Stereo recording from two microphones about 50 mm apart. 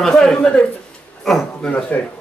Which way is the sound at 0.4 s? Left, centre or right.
Left.